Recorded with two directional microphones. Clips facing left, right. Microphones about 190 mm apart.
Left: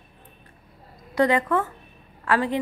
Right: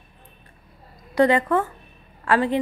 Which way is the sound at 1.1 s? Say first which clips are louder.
Right 3 dB; 30° right (ahead or behind).